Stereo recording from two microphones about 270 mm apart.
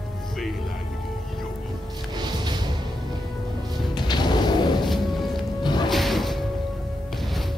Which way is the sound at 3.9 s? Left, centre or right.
Centre.